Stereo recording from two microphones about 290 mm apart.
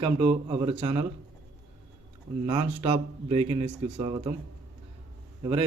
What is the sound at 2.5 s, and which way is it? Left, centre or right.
Speech, centre.